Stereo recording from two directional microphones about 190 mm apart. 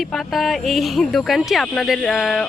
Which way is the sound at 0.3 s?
Centre (ahead or behind).